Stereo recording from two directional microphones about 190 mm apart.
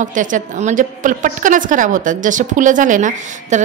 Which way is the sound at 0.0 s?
40° right (ahead or behind).